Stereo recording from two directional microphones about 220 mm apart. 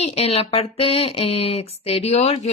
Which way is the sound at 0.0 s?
30° left (ahead or behind).